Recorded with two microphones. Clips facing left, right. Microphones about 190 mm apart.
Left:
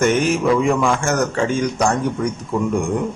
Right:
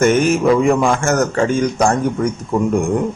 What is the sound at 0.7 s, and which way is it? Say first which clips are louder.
Speech: right 3 dB; 45° right (ahead or behind).